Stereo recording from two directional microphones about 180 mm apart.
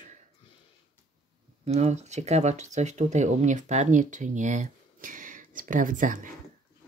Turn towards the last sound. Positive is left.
turn(degrees=-50)  # may be behind; listen again after turning